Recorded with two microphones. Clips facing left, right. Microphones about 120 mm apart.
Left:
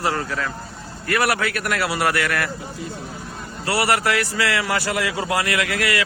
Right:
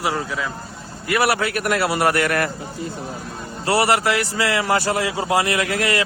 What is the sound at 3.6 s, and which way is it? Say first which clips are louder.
A man's voice: right 3 dB; 25° right (ahead or behind).